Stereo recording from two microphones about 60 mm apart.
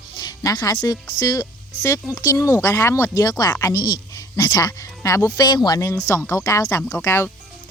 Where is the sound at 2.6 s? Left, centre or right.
Left.